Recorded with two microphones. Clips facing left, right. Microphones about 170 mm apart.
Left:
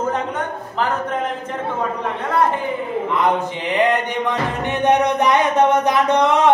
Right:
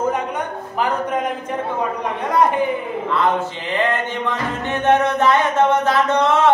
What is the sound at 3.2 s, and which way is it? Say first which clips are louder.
Mantra: even; 15° left (ahead or behind).